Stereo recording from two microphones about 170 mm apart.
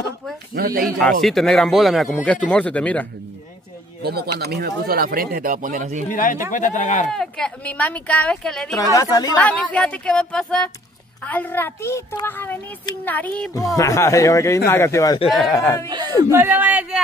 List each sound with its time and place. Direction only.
0.7 s speech: centre (ahead or behind)
4.0 s speech: 65° right (ahead or behind); by 6.0 s 50° right (ahead or behind)
6.0 s speech: 50° left (ahead or behind)
7.1 s speech: 5° left (ahead or behind)
8.7 s speech: 20° left (ahead or behind)
9.4 s a child's voice: 10° left (ahead or behind)
15.2 s speech: centre (ahead or behind)
16.3 s speech: 10° right (ahead or behind)